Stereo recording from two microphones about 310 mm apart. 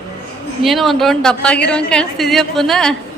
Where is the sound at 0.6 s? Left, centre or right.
Centre.